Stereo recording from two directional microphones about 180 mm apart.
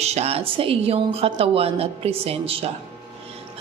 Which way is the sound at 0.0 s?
35° right (ahead or behind).